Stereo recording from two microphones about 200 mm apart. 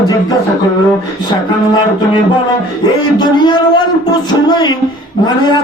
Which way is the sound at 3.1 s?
20° left (ahead or behind).